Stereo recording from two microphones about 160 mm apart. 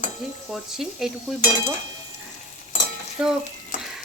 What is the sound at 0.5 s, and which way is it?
Speech, centre (ahead or behind).